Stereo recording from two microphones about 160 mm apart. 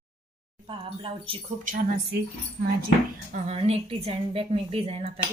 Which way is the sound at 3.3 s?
40° right (ahead or behind).